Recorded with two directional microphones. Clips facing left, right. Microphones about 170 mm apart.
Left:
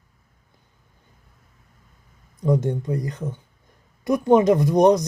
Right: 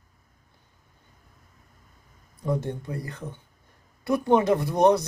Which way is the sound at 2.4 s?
15° left (ahead or behind).